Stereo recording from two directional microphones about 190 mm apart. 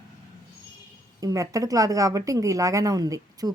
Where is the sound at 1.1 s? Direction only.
15° right (ahead or behind).